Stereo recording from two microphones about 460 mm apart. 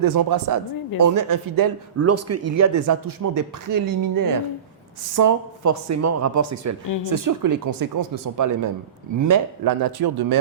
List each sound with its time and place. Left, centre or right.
0.0 s speech: right
2.0 s speech: right